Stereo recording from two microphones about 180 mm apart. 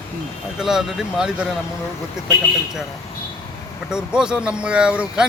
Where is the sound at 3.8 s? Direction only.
5° right (ahead or behind).